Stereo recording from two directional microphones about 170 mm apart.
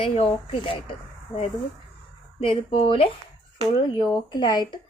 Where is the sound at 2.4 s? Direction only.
30° left (ahead or behind).